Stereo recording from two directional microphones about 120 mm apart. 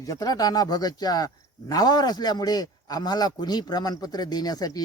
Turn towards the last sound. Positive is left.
turn(degrees=35)  # may be behind; listen again after turning